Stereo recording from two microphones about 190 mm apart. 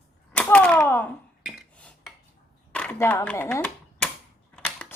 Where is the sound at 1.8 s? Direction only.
5° left (ahead or behind).